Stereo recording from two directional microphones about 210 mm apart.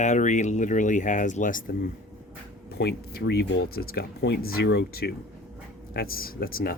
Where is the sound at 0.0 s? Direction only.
35° left (ahead or behind).